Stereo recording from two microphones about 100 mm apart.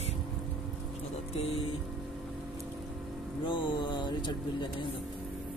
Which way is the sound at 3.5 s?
55° left (ahead or behind).